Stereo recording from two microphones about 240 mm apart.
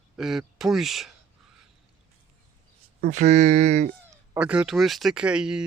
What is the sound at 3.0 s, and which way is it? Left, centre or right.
Speech, right.